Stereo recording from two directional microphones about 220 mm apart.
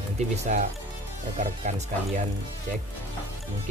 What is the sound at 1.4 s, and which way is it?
Speech, 30° right (ahead or behind).